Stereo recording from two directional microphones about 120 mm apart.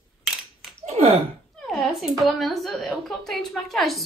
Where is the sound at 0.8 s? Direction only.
60° right (ahead or behind).